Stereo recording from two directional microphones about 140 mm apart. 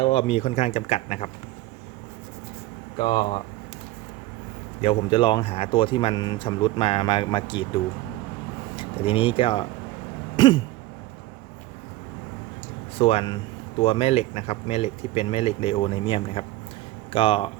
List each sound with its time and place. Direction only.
0.0 s speech: 40° left (ahead or behind)
3.0 s speech: 35° left (ahead or behind)
4.8 s speech: 35° left (ahead or behind)
10.3 s throat clearing: 35° left (ahead or behind)
13.0 s speech: 45° left (ahead or behind)